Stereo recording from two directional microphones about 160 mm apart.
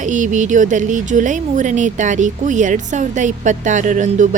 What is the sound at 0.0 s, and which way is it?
Speech, 50° right (ahead or behind).